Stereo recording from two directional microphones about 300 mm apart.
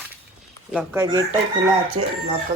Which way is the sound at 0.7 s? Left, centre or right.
Centre.